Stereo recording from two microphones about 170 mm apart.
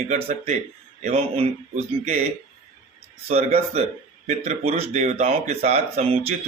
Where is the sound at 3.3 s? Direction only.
40° right (ahead or behind).